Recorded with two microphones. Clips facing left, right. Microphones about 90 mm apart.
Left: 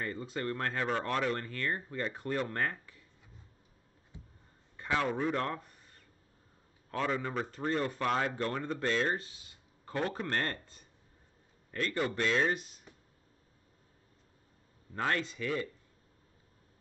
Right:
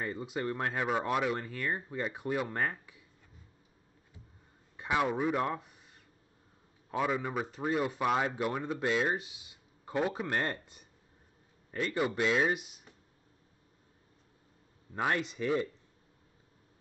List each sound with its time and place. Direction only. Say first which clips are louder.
0.0 s speech: right 1 dB; 15° right (ahead or behind)
4.7 s speech: right 2 dB; 15° right (ahead or behind)
6.9 s speech: right 2 dB; 10° right (ahead or behind)
15.0 s speech: right 1 dB; 15° right (ahead or behind)